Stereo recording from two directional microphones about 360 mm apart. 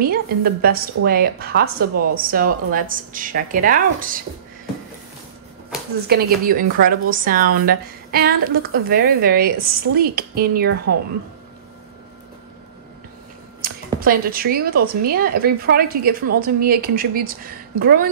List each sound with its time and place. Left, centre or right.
0.0 s a woman's voice: right
6.0 s a woman's voice: right
13.6 s a woman's voice: right